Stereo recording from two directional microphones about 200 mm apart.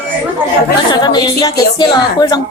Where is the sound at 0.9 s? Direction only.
20° left (ahead or behind).